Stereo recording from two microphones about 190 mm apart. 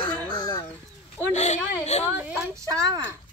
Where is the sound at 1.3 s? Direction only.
40° left (ahead or behind).